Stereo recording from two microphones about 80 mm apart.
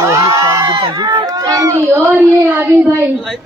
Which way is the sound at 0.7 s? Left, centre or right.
Right.